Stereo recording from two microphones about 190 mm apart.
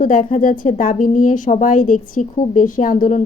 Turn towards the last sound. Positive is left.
turn(degrees=40)  # may be behind; listen again after turning